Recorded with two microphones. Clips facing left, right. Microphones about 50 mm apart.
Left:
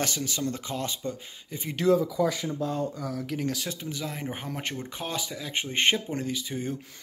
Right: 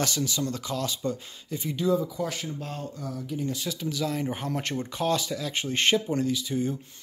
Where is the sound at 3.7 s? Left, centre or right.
Left.